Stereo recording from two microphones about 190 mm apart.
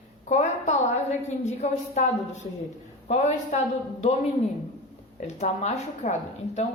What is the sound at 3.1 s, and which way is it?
Speech, 40° left (ahead or behind).